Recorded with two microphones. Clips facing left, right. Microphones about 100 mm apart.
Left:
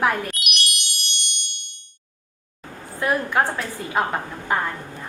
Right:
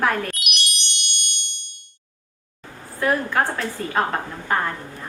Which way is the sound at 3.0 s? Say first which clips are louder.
Even; 15° left (ahead or behind).